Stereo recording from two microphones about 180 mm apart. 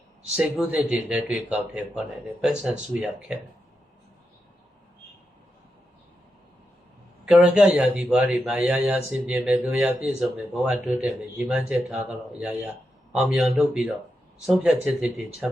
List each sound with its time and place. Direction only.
0.6 s speech: 5° right (ahead or behind)
7.3 s speech: 5° right (ahead or behind)